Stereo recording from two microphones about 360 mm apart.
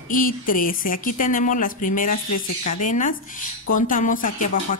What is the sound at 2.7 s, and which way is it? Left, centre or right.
Music, left.